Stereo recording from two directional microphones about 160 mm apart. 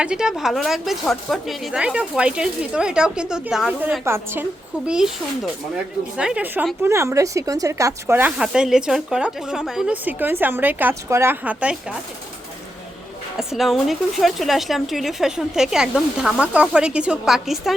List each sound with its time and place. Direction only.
0.0 s speech: 5° right (ahead or behind)
4.9 s speech: 5° right (ahead or behind)
13.5 s speech: centre (ahead or behind)